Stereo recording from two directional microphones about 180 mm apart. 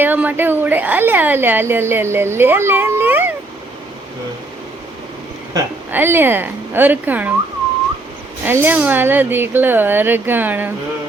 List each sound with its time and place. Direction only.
0.0 s a woman's voice: 10° right (ahead or behind)
5.5 s a woman's voice: 10° right (ahead or behind)
8.4 s a woman's voice: 10° right (ahead or behind)